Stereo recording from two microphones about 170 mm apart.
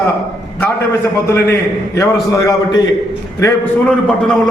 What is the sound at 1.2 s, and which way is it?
A man's voice, 15° left (ahead or behind).